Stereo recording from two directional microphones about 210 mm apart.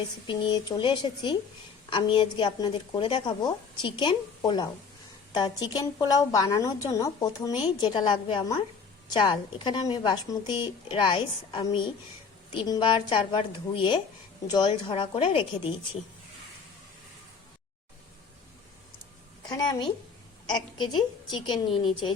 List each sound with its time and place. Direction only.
0.3 s a woman's voice: 20° left (ahead or behind)
19.5 s a woman's voice: 20° left (ahead or behind)